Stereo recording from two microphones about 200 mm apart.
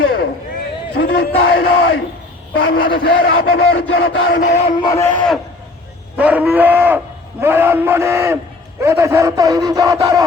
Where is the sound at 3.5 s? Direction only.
90° left.